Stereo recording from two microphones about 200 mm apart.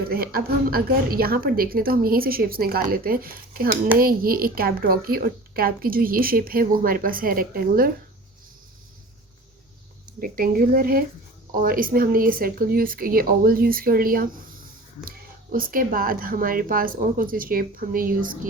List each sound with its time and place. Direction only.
0.1 s a woman's voice: 50° right (ahead or behind)
10.2 s a woman's voice: 45° right (ahead or behind)
15.5 s a woman's voice: 45° right (ahead or behind)